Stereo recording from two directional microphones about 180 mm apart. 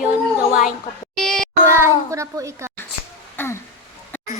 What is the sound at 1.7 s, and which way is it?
A child's voice, 15° right (ahead or behind).